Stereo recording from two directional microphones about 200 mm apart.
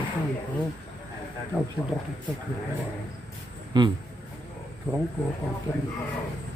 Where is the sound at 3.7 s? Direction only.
20° right (ahead or behind).